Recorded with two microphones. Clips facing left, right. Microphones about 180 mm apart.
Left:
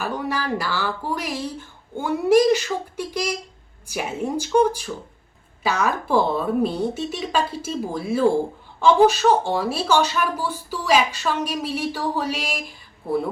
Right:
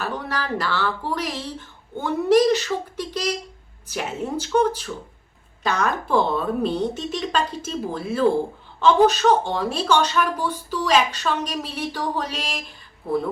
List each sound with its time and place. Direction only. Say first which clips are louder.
0.0 s a woman's voice: left 2 dB; 10° left (ahead or behind)